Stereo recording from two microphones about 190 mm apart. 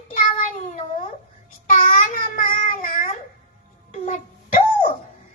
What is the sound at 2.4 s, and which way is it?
Child singing, 45° left (ahead or behind).